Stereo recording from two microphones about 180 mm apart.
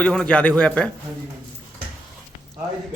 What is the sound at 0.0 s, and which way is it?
Speech, 5° left (ahead or behind).